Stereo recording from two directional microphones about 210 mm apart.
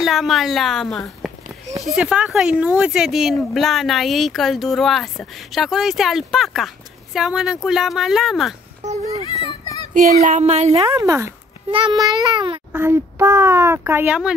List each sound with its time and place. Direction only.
0.0 s speech: centre (ahead or behind)
9.4 s a sound: 20° left (ahead or behind)
9.9 s speech: 35° right (ahead or behind)
11.0 s a child's voice: 15° right (ahead or behind)
12.7 s a child's voice: 10° right (ahead or behind)